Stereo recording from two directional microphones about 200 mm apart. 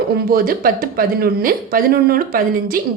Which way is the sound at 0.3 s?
50° right (ahead or behind).